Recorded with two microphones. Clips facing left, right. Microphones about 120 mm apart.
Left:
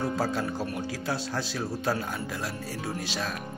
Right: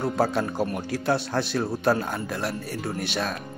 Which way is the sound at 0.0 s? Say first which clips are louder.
Right 4 dB; 65° right (ahead or behind).